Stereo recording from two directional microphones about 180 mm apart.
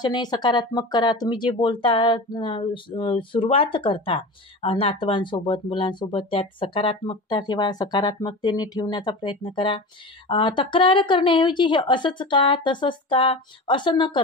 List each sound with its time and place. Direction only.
0.0 s speech: 25° left (ahead or behind)